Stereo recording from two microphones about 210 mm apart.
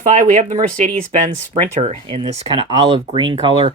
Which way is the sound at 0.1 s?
35° right (ahead or behind).